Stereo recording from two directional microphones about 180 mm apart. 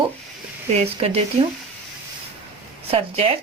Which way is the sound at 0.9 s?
35° right (ahead or behind).